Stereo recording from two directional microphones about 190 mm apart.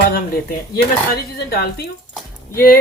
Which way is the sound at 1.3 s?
55° left (ahead or behind).